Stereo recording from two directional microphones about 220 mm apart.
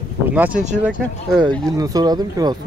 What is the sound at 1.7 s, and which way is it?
Speech, 15° right (ahead or behind).